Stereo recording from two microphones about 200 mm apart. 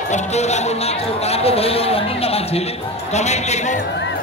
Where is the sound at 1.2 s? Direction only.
30° left (ahead or behind).